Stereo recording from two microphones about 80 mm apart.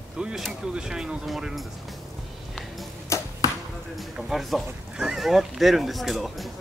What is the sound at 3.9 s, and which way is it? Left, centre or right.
Speech, centre.